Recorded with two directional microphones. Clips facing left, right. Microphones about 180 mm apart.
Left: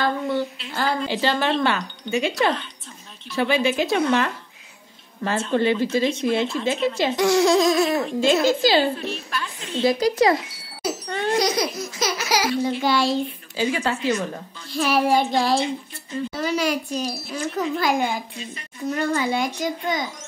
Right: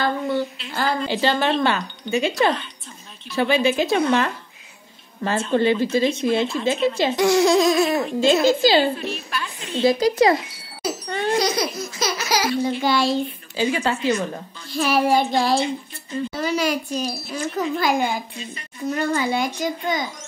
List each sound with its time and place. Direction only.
0.0 s a child's voice: 5° right (ahead or behind)
1.0 s speech: 25° right (ahead or behind)
5.5 s speech: 30° right (ahead or behind)
7.2 s speech: 15° right (ahead or behind)
8.2 s speech: 25° right (ahead or behind)
8.9 s a woman's voice: 10° right (ahead or behind)
9.8 s speech: 25° right (ahead or behind)
11.3 s speech: 15° left (ahead or behind)
12.6 s a child's voice: centre (ahead or behind)
13.6 s speech: 25° right (ahead or behind)
14.7 s a child's voice: centre (ahead or behind)